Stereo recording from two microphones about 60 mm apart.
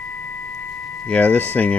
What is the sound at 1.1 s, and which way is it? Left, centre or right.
Speech, left.